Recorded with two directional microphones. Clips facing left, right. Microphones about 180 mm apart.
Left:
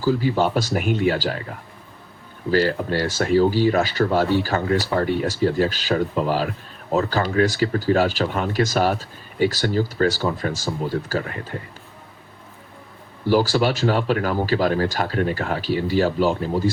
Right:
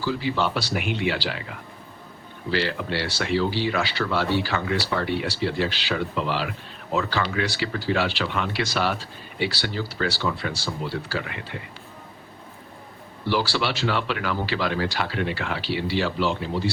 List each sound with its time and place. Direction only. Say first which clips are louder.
0.0 s speech: left 5 dB; 45° left (ahead or behind)
13.2 s speech: left 6 dB; 45° left (ahead or behind)